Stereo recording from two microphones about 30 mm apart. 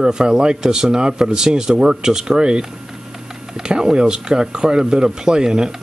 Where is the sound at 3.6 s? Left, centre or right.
Right.